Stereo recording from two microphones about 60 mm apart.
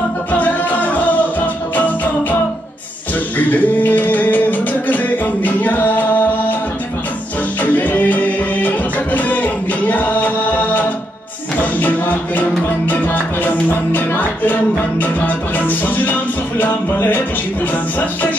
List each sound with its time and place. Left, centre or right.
0.3 s music: left
3.3 s music: left
7.6 s music: left